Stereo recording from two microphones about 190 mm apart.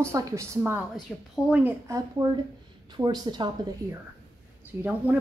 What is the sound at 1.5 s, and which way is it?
A woman's voice, 15° right (ahead or behind).